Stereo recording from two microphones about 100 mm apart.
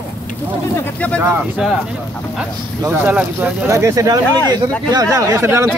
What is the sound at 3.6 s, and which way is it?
Speech, 30° right (ahead or behind).